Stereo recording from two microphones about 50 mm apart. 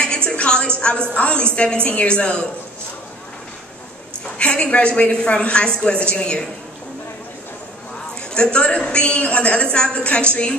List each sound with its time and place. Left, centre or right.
0.0 s a sound: centre
1.5 s a woman's voice: left
4.4 s a woman's voice: left
8.4 s a woman's voice: centre